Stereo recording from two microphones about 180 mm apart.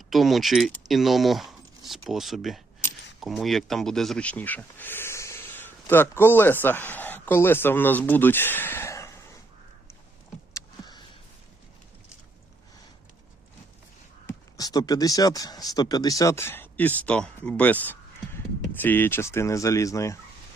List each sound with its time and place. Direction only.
0.1 s speech: centre (ahead or behind); by 9.1 s 15° left (ahead or behind)
10.5 s vehicle: 25° left (ahead or behind)
14.3 s speech: 20° left (ahead or behind)